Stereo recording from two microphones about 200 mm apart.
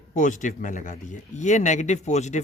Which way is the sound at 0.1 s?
40° left (ahead or behind).